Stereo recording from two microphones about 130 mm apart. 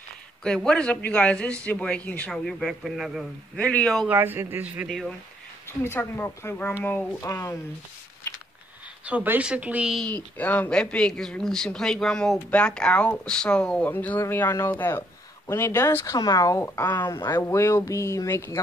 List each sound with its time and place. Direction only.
0.4 s a man's voice: 5° left (ahead or behind)
3.5 s a man's voice: 10° left (ahead or behind)
4.1 s speech: 15° right (ahead or behind)
4.8 s speech: 5° left (ahead or behind)
5.9 s a man's voice: 15° left (ahead or behind)
9.0 s speech: 10° right (ahead or behind)
10.3 s a man's voice: 10° left (ahead or behind)